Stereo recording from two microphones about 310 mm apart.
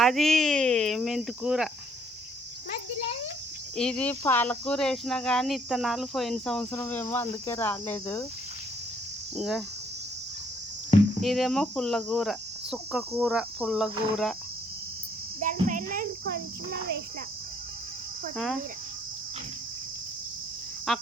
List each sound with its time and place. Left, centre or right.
0.0 s speech: centre
3.8 s speech: centre
9.3 s speech: centre
11.2 s speech: centre
15.4 s insect: right
18.3 s speech: centre
20.9 s speech: centre